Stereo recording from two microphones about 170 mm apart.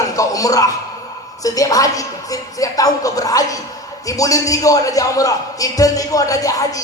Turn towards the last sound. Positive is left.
turn(degrees=20)  # may be behind; listen again after turning